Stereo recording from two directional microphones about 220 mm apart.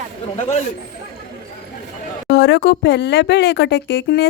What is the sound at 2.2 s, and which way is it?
Speech, 50° left (ahead or behind).